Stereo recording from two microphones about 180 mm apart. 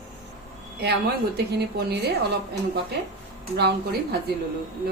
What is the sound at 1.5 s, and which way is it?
Speech, 65° right (ahead or behind).